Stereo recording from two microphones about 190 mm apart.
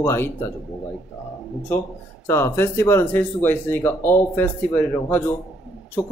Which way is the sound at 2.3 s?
15° left (ahead or behind).